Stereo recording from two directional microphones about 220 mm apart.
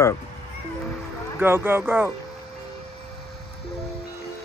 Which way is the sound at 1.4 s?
10° right (ahead or behind).